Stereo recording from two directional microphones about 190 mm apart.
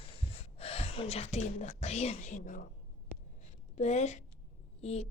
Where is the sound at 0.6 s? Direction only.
30° left (ahead or behind).